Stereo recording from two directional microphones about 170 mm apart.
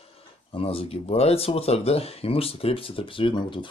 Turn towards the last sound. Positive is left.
turn(degrees=30)  # may be behind; listen again after turning